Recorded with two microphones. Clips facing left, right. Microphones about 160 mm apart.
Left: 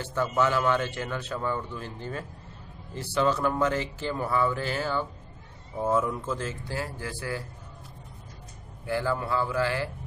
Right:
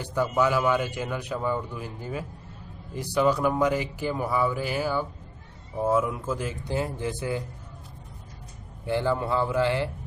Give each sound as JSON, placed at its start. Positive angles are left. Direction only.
{"t": 0.0, "sound": "a man's voice", "side_deg": -10}
{"t": 8.8, "sound": "speech", "side_deg": -20}